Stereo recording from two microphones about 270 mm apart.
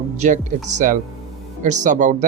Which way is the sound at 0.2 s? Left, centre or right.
Right.